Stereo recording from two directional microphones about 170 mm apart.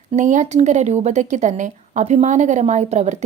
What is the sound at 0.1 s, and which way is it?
Speech, 45° right (ahead or behind).